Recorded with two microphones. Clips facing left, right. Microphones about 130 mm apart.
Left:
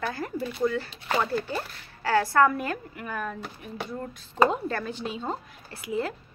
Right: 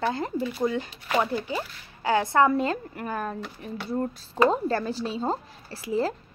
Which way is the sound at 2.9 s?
40° right (ahead or behind).